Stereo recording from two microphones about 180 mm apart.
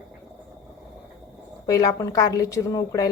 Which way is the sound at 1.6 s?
20° left (ahead or behind).